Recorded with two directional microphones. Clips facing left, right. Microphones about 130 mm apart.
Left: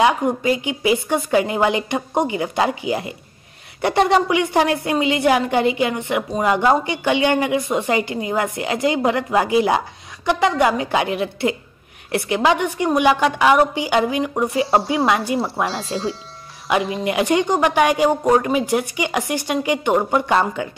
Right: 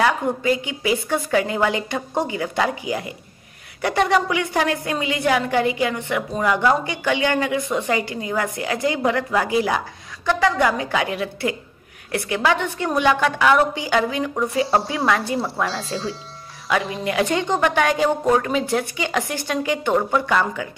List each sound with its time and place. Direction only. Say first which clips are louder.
0.0 s a woman's voice: left 3 dB; 20° left (ahead or behind)
14.3 s a woman's voice: left 1 dB; 25° left (ahead or behind)
15.7 s speech: left 3 dB; centre (ahead or behind)
17.0 s speech: left 3 dB; 20° left (ahead or behind)